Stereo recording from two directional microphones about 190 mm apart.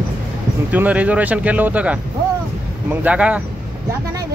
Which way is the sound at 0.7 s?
10° right (ahead or behind).